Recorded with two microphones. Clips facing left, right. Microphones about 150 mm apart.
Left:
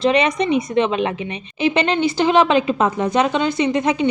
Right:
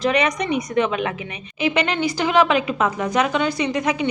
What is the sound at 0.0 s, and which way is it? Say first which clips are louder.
Speech: left 3 dB; 30° left (ahead or behind).